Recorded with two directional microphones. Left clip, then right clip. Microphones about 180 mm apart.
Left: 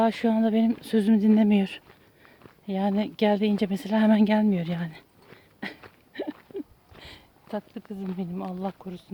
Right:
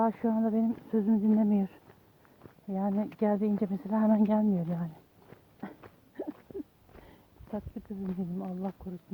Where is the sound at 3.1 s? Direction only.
40° left (ahead or behind).